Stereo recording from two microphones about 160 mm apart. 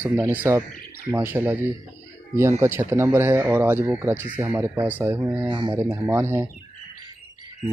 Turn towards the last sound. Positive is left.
turn(degrees=-15)  # may be behind; listen again after turning